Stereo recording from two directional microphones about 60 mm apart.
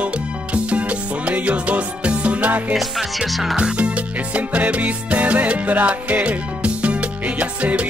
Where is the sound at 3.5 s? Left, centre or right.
Centre.